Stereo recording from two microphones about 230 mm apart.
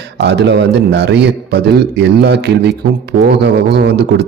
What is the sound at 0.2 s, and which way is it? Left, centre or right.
A man's voice, right.